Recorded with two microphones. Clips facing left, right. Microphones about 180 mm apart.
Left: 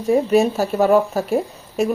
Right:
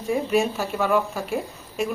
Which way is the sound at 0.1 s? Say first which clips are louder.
Left 7 dB; 40° left (ahead or behind).